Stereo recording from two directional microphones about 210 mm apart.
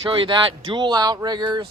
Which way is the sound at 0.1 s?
25° right (ahead or behind).